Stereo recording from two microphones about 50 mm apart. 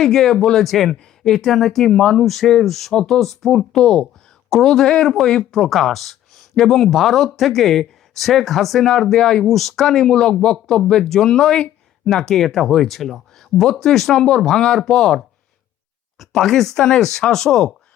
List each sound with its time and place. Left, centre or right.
0.0 s speech: centre
5.4 s speech: centre
9.5 s speech: centre